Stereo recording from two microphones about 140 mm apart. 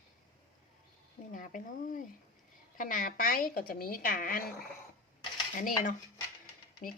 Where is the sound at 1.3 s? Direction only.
70° left (ahead or behind); by 4.5 s 90° left.